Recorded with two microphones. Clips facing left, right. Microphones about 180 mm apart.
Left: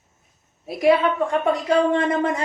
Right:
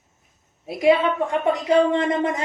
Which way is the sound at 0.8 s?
20° right (ahead or behind).